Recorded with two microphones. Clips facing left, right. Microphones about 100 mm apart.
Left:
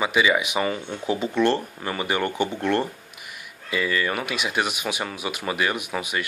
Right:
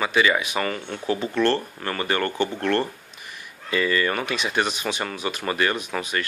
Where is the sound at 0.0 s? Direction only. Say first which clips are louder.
Even; 10° left (ahead or behind).